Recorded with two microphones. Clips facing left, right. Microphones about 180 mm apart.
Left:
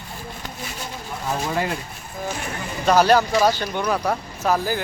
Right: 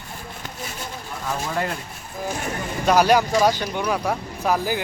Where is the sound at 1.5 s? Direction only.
5° left (ahead or behind).